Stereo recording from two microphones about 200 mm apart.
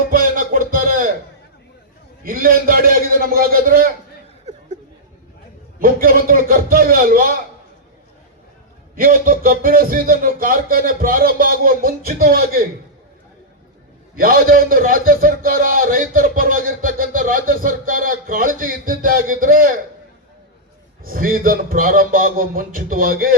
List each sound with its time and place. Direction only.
0.1 s music: 45° right (ahead or behind)
2.2 s a man's voice: 45° right (ahead or behind)
5.8 s a man's voice: 45° right (ahead or behind)
9.0 s a man's voice: 45° right (ahead or behind)
14.2 s a man's voice: 45° right (ahead or behind)
21.0 s a man's voice: 45° right (ahead or behind)